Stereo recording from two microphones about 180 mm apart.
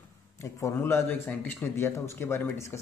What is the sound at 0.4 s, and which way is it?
Speech, 15° left (ahead or behind).